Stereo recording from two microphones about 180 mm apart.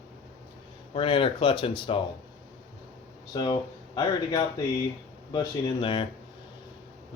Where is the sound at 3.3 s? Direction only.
25° left (ahead or behind).